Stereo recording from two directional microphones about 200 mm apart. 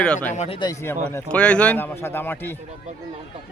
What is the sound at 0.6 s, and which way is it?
A man's voice, 15° left (ahead or behind).